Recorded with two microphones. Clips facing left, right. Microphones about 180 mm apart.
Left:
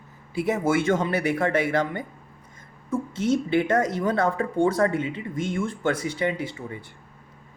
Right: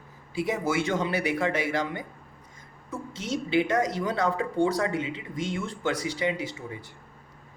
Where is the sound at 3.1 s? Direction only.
55° left (ahead or behind).